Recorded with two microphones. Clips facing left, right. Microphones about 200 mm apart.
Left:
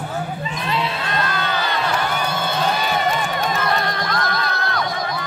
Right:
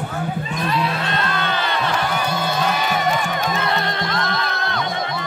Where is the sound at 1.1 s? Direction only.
25° right (ahead or behind).